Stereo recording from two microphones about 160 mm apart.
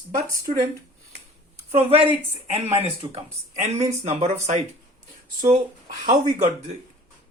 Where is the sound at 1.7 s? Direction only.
40° right (ahead or behind).